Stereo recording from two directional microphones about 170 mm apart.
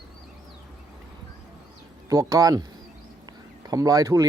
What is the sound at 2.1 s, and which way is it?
Speech, 20° right (ahead or behind).